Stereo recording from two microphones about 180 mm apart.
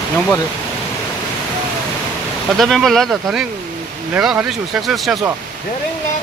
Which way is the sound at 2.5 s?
Centre (ahead or behind).